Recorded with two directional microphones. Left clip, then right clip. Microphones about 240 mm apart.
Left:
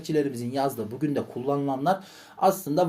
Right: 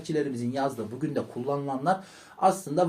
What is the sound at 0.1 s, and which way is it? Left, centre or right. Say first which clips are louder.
Speech: left 3 dB; left.